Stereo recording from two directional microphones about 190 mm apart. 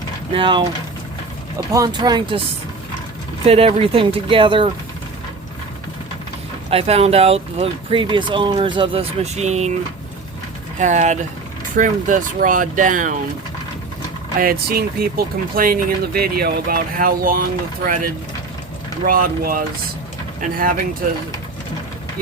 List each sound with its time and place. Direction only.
0.3 s speech: 25° right (ahead or behind)
1.7 s speech: 20° right (ahead or behind)
3.4 s speech: 30° right (ahead or behind)
6.7 s speech: 30° right (ahead or behind)
10.8 s speech: 40° right (ahead or behind)
14.3 s speech: 50° right (ahead or behind)
19.0 s speech: 50° right (ahead or behind)